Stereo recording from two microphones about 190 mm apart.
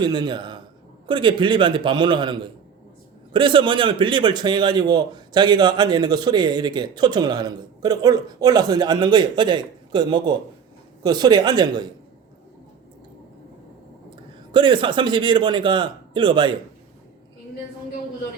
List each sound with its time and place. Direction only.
0.0 s a man's voice: 25° right (ahead or behind)
14.5 s a man's voice: 25° right (ahead or behind)